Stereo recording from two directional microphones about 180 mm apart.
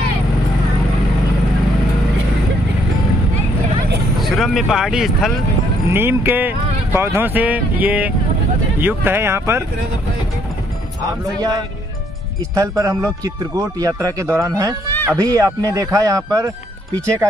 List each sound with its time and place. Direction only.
4.2 s speech: centre (ahead or behind)
5.9 s a man's voice: 10° right (ahead or behind)
11.3 s a man's voice: 20° right (ahead or behind)